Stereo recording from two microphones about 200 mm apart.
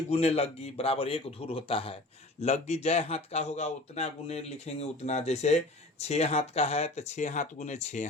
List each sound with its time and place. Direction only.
0.1 s a man's voice: 30° left (ahead or behind)